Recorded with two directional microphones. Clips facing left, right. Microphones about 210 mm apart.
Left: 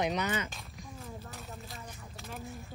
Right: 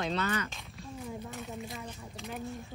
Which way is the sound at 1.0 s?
Centre (ahead or behind).